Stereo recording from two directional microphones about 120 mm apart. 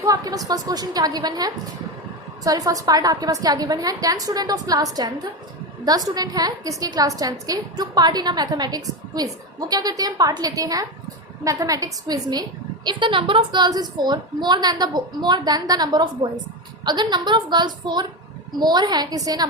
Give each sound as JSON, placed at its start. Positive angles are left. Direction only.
{"t": 0.0, "sound": "a woman's voice", "side_deg": -30}